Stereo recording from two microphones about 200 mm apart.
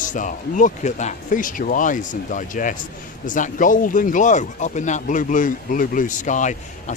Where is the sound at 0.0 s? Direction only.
40° left (ahead or behind).